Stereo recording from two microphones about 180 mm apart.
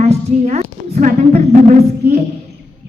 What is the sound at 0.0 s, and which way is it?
A woman's voice, 40° right (ahead or behind).